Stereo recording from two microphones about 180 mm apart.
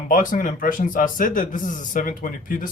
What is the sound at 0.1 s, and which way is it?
Speech, 50° left (ahead or behind).